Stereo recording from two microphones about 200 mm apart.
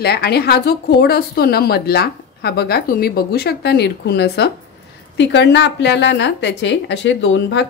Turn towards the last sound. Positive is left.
turn(degrees=65)  # may be behind; listen again after turning